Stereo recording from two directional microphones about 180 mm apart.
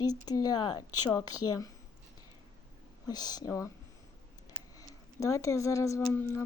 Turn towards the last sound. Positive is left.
turn(degrees=15)  # may be behind; listen again after turning